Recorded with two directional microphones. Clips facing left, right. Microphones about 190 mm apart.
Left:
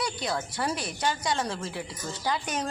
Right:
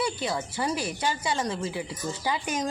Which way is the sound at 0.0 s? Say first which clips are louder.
Right 2 dB; 5° right (ahead or behind).